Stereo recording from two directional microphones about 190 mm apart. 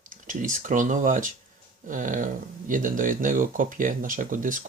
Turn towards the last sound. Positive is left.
turn(degrees=-45)  # may be behind; listen again after turning